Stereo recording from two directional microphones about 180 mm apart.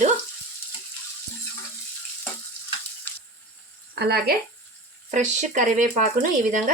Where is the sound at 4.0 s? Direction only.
60° right (ahead or behind).